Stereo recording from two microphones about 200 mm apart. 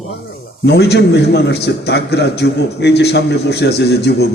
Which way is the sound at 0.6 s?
55° left (ahead or behind).